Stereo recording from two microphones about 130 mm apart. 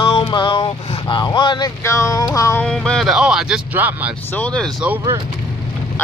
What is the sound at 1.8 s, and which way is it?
Speech, 20° left (ahead or behind).